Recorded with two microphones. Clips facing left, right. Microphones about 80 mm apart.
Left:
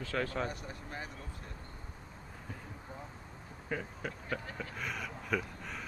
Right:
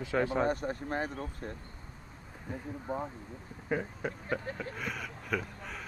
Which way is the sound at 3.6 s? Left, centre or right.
Centre.